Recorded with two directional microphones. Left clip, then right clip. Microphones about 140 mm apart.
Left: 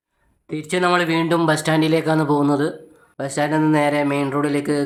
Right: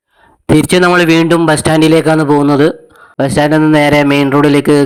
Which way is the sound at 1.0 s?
60° right (ahead or behind).